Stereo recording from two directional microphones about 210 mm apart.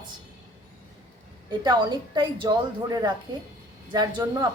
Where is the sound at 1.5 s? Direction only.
20° right (ahead or behind).